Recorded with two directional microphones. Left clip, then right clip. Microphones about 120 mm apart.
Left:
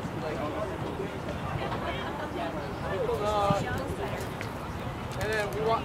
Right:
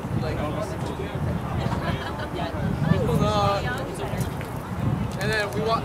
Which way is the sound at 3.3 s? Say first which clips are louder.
Right 4 dB; 45° right (ahead or behind).